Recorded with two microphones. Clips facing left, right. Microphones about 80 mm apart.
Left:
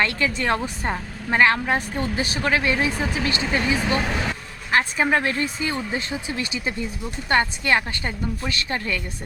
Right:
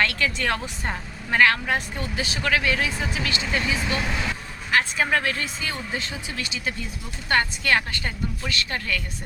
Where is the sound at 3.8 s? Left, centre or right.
Left.